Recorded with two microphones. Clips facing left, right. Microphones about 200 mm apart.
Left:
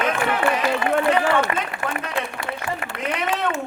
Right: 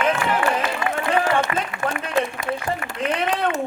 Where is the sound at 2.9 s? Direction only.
40° right (ahead or behind).